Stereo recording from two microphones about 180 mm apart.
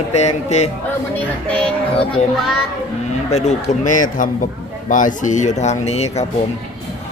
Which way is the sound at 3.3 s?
40° left (ahead or behind).